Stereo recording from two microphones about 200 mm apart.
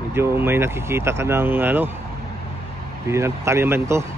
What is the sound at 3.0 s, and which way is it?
Speech, 15° right (ahead or behind).